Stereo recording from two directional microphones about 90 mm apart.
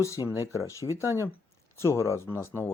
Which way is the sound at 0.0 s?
35° left (ahead or behind).